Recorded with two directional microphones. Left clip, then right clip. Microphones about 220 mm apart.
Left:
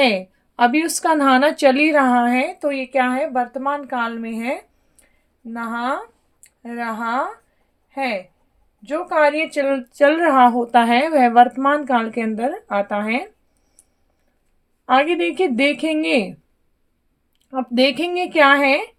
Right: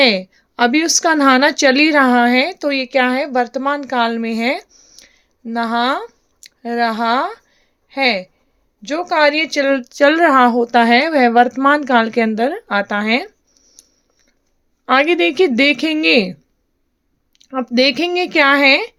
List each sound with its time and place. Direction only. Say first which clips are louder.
0.0 s a woman's voice: right 4 dB; 30° right (ahead or behind)
14.8 s a woman's voice: right 3 dB; 35° right (ahead or behind)
17.3 s a woman's voice: right 3 dB; 35° right (ahead or behind)